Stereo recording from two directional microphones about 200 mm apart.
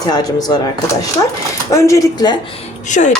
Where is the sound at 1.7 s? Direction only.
15° left (ahead or behind).